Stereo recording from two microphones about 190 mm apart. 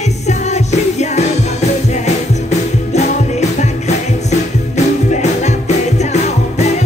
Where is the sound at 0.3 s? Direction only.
35° left (ahead or behind).